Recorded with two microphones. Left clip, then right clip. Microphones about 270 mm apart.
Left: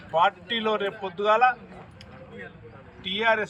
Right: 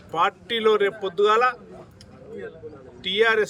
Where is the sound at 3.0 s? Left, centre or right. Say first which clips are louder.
Right 4 dB; centre.